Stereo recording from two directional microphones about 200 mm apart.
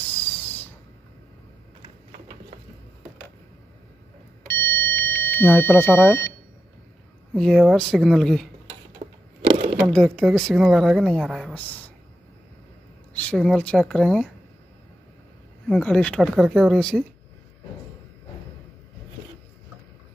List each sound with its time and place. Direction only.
4.5 s a sound: 10° left (ahead or behind)
6.0 s speech: 15° left (ahead or behind)
7.3 s a woman's voice: centre (ahead or behind)
9.0 s a sound: 30° right (ahead or behind)
9.9 s a woman's voice: centre (ahead or behind)
13.1 s a woman's voice: 5° left (ahead or behind)
15.7 s a woman's voice: 5° left (ahead or behind)